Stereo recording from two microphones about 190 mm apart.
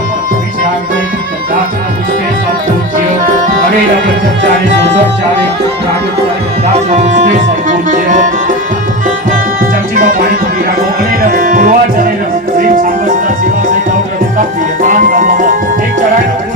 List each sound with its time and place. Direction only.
6.9 s music: 40° right (ahead or behind)
9.9 s music: 45° right (ahead or behind)
14.8 s music: 45° right (ahead or behind)